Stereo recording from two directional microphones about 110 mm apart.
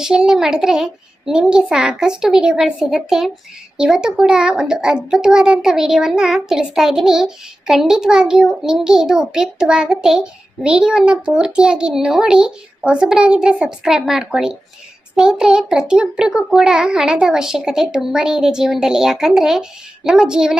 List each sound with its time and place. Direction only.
0.0 s a child's voice: 5° right (ahead or behind)